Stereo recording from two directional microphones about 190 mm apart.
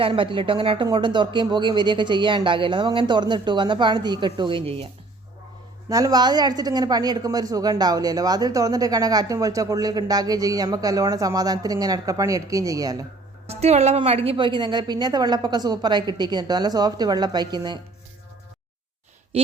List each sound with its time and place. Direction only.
0.0 s a woman's voice: 25° right (ahead or behind)
5.9 s a woman's voice: 20° right (ahead or behind)
13.5 s a woman's voice: 35° right (ahead or behind)